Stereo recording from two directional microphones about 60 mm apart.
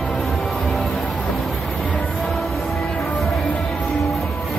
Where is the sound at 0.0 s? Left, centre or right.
Centre.